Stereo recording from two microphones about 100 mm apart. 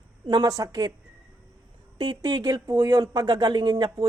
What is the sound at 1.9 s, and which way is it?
Speech, 45° right (ahead or behind).